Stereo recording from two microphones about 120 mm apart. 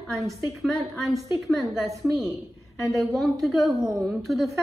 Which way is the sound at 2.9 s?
Centre (ahead or behind).